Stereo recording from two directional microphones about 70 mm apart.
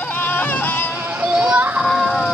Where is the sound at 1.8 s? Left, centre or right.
Centre.